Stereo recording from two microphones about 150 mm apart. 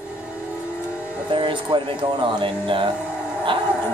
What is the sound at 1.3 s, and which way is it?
Speech, 35° right (ahead or behind).